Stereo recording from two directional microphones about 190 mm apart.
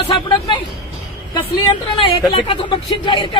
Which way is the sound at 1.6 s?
25° left (ahead or behind).